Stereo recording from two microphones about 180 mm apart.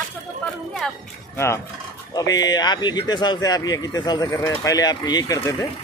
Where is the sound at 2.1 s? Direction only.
20° left (ahead or behind).